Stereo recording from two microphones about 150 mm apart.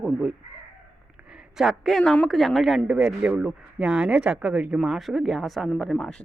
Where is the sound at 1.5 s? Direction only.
Centre (ahead or behind).